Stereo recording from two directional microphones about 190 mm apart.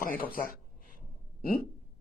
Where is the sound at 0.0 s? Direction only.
50° left (ahead or behind).